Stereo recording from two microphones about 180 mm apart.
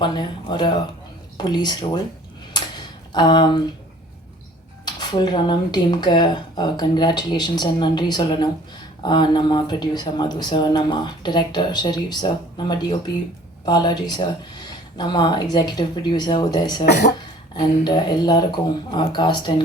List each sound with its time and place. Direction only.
0.0 s speech: 25° left (ahead or behind)
3.1 s speech: 25° left (ahead or behind)
4.9 s speech: 25° left (ahead or behind)